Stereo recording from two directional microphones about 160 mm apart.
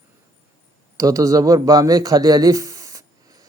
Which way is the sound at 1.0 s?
20° right (ahead or behind).